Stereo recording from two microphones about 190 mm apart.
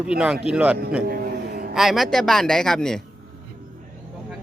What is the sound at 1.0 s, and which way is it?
Vehicle, 50° right (ahead or behind).